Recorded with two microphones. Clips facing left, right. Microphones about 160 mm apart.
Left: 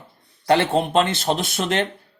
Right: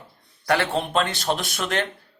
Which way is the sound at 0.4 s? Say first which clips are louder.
Left 5 dB; 20° left (ahead or behind).